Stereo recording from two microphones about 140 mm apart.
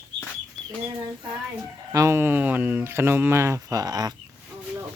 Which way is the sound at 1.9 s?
20° right (ahead or behind).